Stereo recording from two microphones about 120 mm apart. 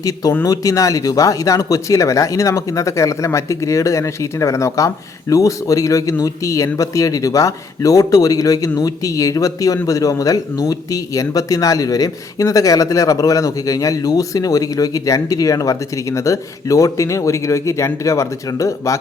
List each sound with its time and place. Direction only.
0.0 s a man's voice: 30° left (ahead or behind)